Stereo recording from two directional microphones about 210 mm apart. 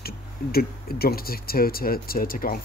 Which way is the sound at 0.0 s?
45° left (ahead or behind).